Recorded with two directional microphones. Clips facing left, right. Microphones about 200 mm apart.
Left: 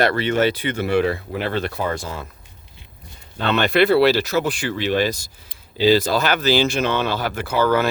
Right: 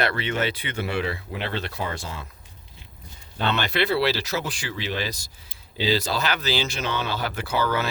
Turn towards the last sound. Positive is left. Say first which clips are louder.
# left 6 dB
turn(degrees=50)  # may be behind; listen again after turning